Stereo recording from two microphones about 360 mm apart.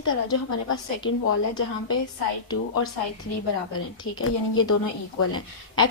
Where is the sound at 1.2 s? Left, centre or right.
Left.